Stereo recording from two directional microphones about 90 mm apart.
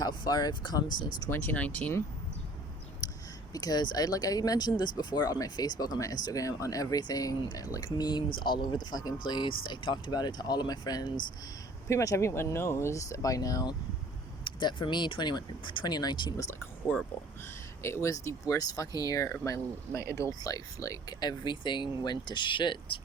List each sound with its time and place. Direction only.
0.0 s speech: 50° left (ahead or behind)
1.3 s speech: 20° left (ahead or behind)
3.0 s a sound: 45° left (ahead or behind)
3.5 s speech: 45° left (ahead or behind)
11.9 s speech: 35° left (ahead or behind)
14.4 s speech: 60° left (ahead or behind)
17.8 s speech: 30° left (ahead or behind); by 23.0 s 65° left (ahead or behind)